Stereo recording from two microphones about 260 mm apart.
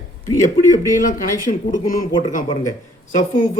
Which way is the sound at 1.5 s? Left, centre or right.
Left.